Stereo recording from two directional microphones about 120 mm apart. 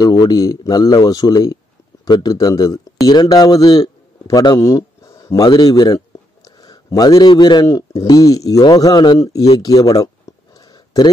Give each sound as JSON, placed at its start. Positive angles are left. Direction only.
{"t": 0.0, "sound": "speech", "side_deg": 30}
{"t": 7.6, "sound": "speech", "side_deg": 25}
{"t": 9.6, "sound": "a sound", "side_deg": 30}